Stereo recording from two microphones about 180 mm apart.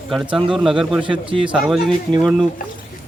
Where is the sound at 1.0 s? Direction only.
30° right (ahead or behind).